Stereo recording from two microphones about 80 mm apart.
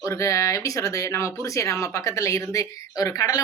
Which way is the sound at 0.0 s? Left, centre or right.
Left.